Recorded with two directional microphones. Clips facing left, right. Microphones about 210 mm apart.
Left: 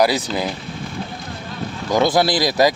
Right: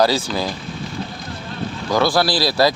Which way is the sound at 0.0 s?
15° left (ahead or behind).